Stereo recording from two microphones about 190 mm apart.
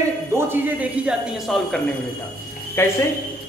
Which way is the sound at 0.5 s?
10° right (ahead or behind).